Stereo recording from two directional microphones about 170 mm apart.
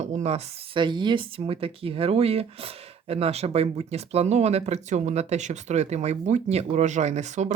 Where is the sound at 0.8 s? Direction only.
25° right (ahead or behind).